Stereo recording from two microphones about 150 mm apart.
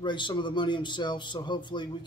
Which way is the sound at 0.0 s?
30° left (ahead or behind).